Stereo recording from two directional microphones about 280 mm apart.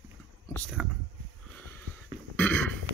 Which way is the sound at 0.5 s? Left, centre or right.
Centre.